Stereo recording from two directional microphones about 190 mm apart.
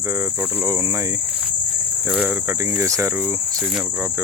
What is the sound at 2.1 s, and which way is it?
Speech, 5° right (ahead or behind).